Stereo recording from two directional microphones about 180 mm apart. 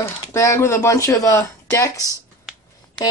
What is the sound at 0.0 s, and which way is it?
Speech, 15° left (ahead or behind).